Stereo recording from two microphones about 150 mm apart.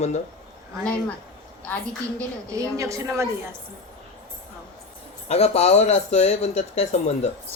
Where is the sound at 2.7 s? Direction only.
20° right (ahead or behind).